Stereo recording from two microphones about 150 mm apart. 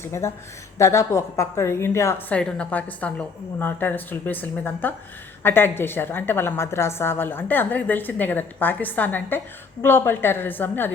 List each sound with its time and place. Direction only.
0.0 s a woman's voice: 15° left (ahead or behind)